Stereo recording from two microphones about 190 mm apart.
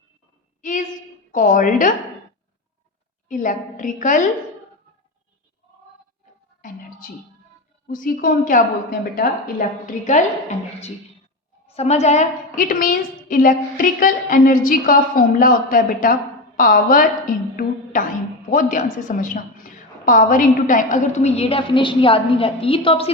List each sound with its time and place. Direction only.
0.6 s a sound: 45° left (ahead or behind)
1.3 s a woman's voice: 45° left (ahead or behind)
3.2 s a woman's voice: 45° left (ahead or behind)
7.9 s a woman's voice: 45° left (ahead or behind)
11.7 s a woman's voice: 35° left (ahead or behind)